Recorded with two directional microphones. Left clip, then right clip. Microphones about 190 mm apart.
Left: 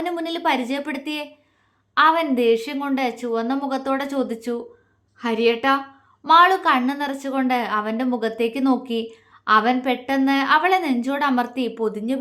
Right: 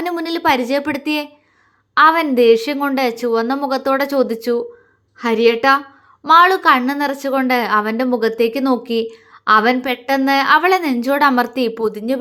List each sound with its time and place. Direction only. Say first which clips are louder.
0.0 s a woman's voice: right 5 dB; 25° right (ahead or behind)